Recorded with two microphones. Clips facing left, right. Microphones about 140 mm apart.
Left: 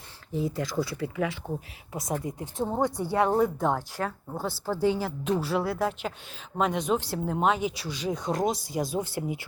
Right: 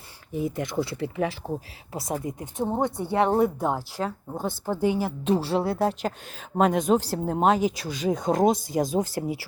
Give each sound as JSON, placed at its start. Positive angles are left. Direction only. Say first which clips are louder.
{"t": 0.3, "sound": "speech", "louder": "right 1 dB", "side_deg": -20}
{"t": 2.4, "sound": "speech", "louder": "right 1 dB", "side_deg": -20}
{"t": 5.2, "sound": "speech", "louder": "right 3 dB", "side_deg": -30}
{"t": 6.6, "sound": "speech", "louder": "right 5 dB", "side_deg": -45}